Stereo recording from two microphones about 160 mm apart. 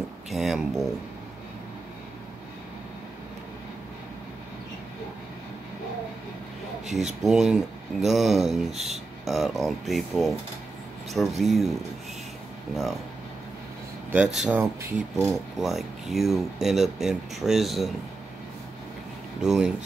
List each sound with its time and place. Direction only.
0.3 s speech: centre (ahead or behind)
7.2 s speech: 5° right (ahead or behind)
14.1 s speech: 5° right (ahead or behind)
14.6 s speech: 15° right (ahead or behind)
15.2 s speech: centre (ahead or behind)
19.4 s speech: 5° right (ahead or behind)